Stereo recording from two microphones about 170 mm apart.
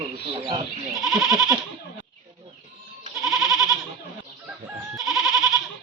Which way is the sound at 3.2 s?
Centre (ahead or behind).